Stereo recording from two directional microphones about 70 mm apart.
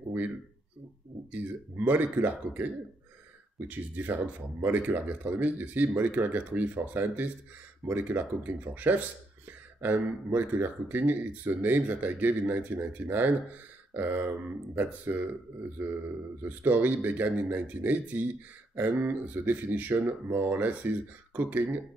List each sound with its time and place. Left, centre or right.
1.3 s a man's voice: right